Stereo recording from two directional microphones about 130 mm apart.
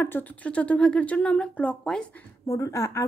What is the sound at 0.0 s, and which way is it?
Speech, 15° left (ahead or behind).